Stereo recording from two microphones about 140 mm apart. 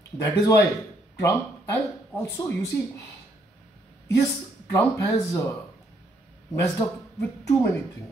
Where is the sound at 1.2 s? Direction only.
15° left (ahead or behind).